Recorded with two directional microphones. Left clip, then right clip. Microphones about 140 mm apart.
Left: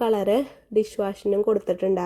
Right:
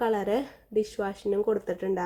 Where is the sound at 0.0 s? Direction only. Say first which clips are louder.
Left 5 dB; 20° left (ahead or behind).